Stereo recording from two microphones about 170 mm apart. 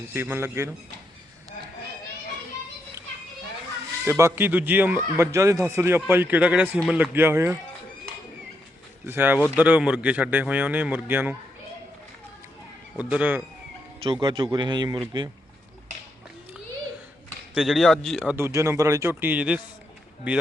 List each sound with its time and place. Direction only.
0.1 s speech: 15° right (ahead or behind)
4.0 s speech: 15° right (ahead or behind)
9.0 s speech: 10° right (ahead or behind)
13.0 s speech: 5° right (ahead or behind)
14.0 s speech: 30° right (ahead or behind)
17.5 s a man's voice: centre (ahead or behind)
18.3 s speech: 15° right (ahead or behind)